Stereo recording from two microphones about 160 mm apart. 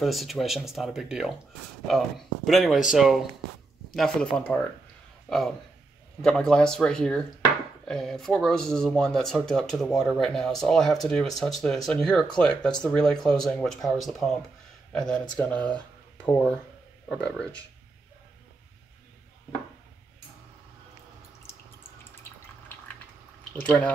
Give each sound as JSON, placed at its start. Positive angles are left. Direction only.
{"t": 0.0, "sound": "speech", "side_deg": 0}
{"t": 17.1, "sound": "speech", "side_deg": 5}
{"t": 23.5, "sound": "speech", "side_deg": 10}